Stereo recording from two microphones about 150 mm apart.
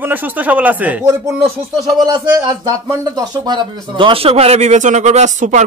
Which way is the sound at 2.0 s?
30° right (ahead or behind).